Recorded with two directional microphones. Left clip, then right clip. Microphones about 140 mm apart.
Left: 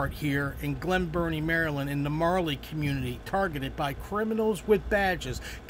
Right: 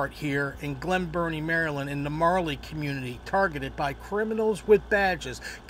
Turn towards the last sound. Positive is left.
turn(degrees=25)  # may be behind; listen again after turning